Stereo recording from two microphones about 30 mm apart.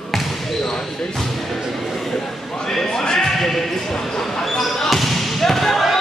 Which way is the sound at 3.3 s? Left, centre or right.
Centre.